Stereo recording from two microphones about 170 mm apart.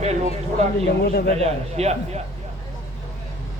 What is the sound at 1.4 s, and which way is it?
Speech, 40° right (ahead or behind).